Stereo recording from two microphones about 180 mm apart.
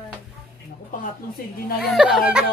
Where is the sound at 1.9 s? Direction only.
5° right (ahead or behind).